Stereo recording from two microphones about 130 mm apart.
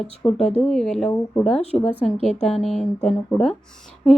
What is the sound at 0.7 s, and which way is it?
Speech, 5° left (ahead or behind).